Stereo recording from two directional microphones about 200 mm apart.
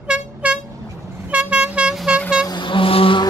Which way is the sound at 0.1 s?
5° right (ahead or behind).